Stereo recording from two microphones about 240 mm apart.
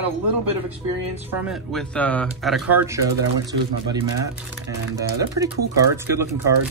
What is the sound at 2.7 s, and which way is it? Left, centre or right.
Speech, centre.